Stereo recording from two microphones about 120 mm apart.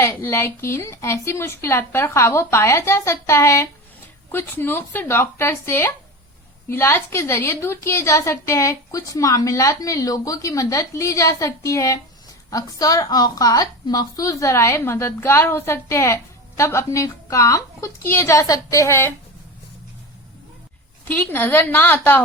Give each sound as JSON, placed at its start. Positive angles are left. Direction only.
{"t": 0.0, "sound": "a woman's voice", "side_deg": 25}
{"t": 21.0, "sound": "a woman's voice", "side_deg": 15}